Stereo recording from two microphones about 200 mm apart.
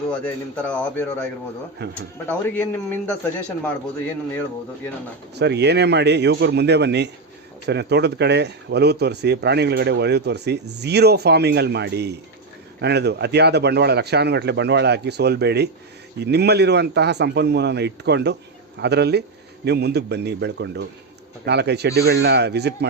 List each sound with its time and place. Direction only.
0.1 s a man's voice: 5° left (ahead or behind)
1.8 s speech: 55° right (ahead or behind)
2.2 s a man's voice: 10° left (ahead or behind)
5.3 s speech: 55° right (ahead or behind)